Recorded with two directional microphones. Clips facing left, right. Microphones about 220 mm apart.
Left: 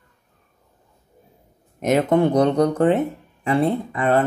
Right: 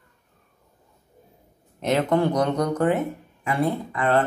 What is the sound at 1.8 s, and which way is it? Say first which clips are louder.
Speech: left 4 dB; 15° left (ahead or behind).